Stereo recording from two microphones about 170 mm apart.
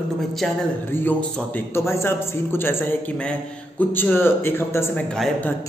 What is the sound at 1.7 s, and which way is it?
A man's voice, 15° left (ahead or behind).